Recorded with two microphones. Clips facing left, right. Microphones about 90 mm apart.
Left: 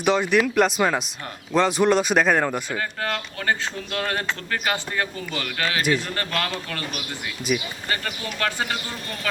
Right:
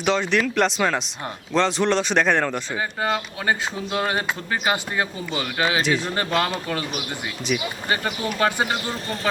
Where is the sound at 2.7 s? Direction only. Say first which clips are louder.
Right 3 dB; 10° right (ahead or behind).